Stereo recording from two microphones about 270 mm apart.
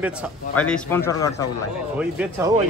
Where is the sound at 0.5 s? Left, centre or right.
Centre.